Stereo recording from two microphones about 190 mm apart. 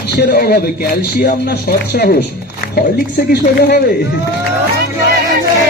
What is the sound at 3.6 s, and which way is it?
Speech, 55° left (ahead or behind).